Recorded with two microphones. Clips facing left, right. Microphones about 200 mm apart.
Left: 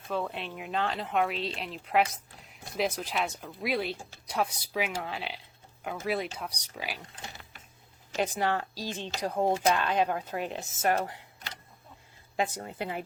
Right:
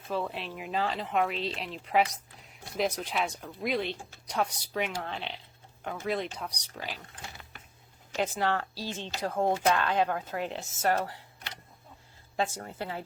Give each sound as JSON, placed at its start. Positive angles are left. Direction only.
{"t": 0.1, "sound": "speech", "side_deg": 0}
{"t": 8.1, "sound": "speech", "side_deg": 15}
{"t": 12.4, "sound": "speech", "side_deg": 15}